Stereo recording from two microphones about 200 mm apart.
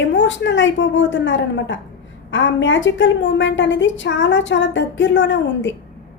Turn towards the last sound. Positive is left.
turn(degrees=65)  # may be behind; listen again after turning